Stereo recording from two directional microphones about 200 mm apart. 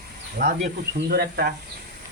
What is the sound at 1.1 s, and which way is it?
Speech, 50° right (ahead or behind).